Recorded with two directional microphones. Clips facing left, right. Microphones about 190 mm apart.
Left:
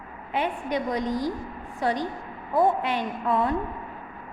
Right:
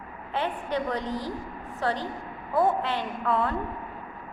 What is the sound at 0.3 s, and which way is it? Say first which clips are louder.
A woman's voice: left 2 dB; 15° left (ahead or behind).